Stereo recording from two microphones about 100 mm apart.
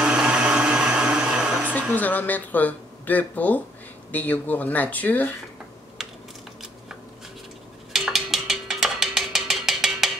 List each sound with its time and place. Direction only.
0.0 s blender: 10° right (ahead or behind)
1.8 s speech: 15° left (ahead or behind)
7.9 s music: 5° right (ahead or behind)